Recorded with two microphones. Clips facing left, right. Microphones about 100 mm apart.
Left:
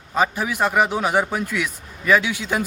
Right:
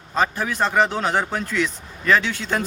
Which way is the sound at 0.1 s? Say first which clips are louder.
Left 1 dB; 10° left (ahead or behind).